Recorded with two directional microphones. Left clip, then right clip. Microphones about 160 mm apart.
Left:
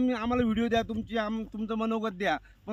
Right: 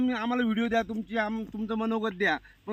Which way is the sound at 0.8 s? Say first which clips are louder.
Right 1 dB; 20° left (ahead or behind).